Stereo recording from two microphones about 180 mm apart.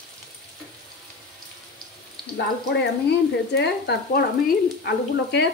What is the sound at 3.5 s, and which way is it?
Speech, 65° left (ahead or behind).